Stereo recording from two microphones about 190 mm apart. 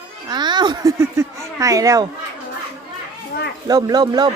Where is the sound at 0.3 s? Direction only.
25° right (ahead or behind).